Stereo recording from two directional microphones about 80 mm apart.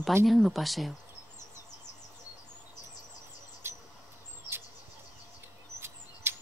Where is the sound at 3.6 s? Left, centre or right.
Right.